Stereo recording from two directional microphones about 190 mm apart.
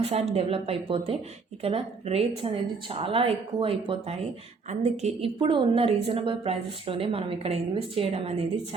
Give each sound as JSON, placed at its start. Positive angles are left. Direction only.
{"t": 0.0, "sound": "a woman's voice", "side_deg": -35}